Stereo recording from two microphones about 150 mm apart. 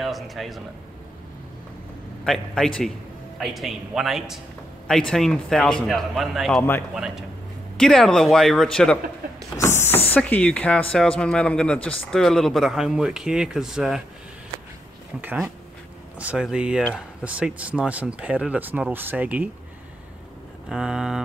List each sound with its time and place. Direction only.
0.0 s speech: centre (ahead or behind)
2.2 s speech: centre (ahead or behind)
9.6 s a sound: 15° left (ahead or behind)
10.1 s speech: 10° left (ahead or behind)
15.2 s speech: 5° right (ahead or behind)
20.6 s speech: 5° right (ahead or behind)